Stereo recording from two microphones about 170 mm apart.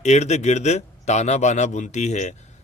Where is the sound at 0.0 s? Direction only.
40° left (ahead or behind).